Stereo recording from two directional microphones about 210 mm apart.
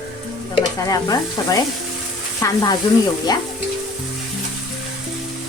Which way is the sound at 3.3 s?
20° left (ahead or behind).